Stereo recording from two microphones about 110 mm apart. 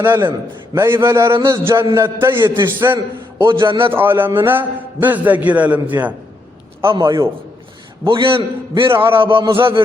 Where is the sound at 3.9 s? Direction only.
20° right (ahead or behind).